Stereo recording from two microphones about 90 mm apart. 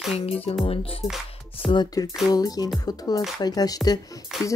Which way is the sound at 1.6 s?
90° left.